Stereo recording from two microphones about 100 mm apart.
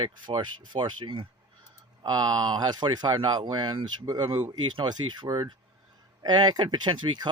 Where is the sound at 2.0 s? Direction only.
45° right (ahead or behind).